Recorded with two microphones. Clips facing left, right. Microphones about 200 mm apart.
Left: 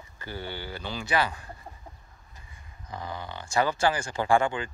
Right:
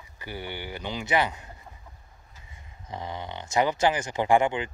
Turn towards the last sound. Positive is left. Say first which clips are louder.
# right 2 dB
turn(degrees=-20)  # may be behind; listen again after turning